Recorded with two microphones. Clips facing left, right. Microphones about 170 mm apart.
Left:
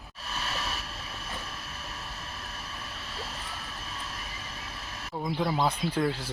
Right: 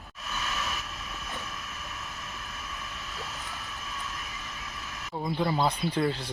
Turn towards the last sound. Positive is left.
turn(degrees=5)  # may be behind; listen again after turning